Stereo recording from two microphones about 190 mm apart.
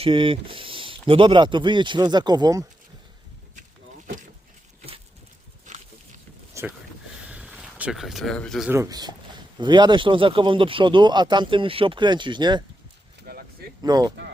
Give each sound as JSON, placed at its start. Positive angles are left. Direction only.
{"t": 0.0, "sound": "speech", "side_deg": -25}
{"t": 5.7, "sound": "pig", "side_deg": -40}
{"t": 6.5, "sound": "a sound", "side_deg": -15}
{"t": 8.7, "sound": "speech", "side_deg": -15}
{"t": 13.8, "sound": "speech", "side_deg": -20}